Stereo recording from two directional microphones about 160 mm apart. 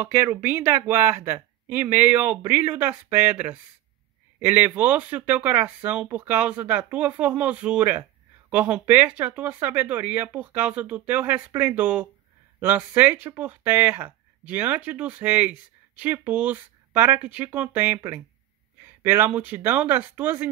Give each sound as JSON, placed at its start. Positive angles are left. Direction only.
{"t": 0.0, "sound": "speech", "side_deg": -15}